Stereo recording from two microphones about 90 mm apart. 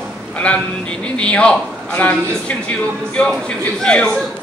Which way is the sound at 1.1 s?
10° left (ahead or behind).